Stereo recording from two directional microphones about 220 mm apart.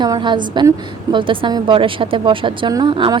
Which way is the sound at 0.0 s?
20° right (ahead or behind).